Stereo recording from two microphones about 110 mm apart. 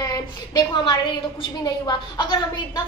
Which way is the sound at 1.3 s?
45° left (ahead or behind).